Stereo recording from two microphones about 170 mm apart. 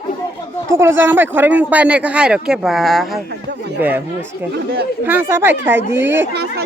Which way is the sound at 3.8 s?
10° right (ahead or behind).